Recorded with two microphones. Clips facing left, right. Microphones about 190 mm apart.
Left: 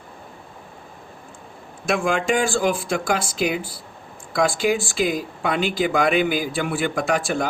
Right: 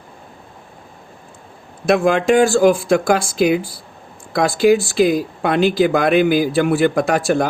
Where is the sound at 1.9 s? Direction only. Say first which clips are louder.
Right 7 dB; 40° right (ahead or behind).